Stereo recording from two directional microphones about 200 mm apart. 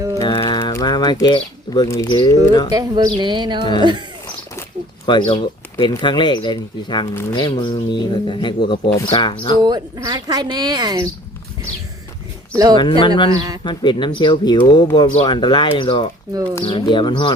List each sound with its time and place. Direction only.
0.2 s speech: 20° left (ahead or behind)
2.6 s speech: 20° right (ahead or behind)
5.0 s speech: 25° left (ahead or behind)
9.6 s speech: 20° right (ahead or behind)
12.7 s speech: 25° left (ahead or behind)
13.3 s speech: 20° right (ahead or behind)
13.7 s speech: 25° left (ahead or behind)